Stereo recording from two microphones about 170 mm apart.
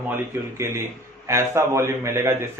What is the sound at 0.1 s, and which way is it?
A man's voice, 15° right (ahead or behind).